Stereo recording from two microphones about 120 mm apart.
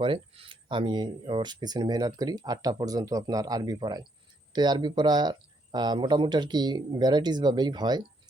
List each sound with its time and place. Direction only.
0.0 s speech: 45° right (ahead or behind)